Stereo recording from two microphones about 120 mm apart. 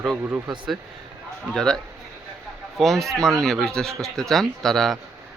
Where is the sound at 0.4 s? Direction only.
40° right (ahead or behind).